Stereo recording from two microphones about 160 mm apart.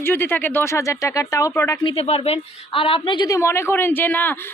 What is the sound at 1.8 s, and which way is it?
A woman's voice, 35° left (ahead or behind).